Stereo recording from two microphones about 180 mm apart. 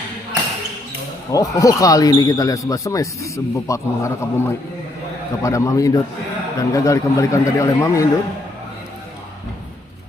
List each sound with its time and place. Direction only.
1.3 s a man's voice: 20° left (ahead or behind)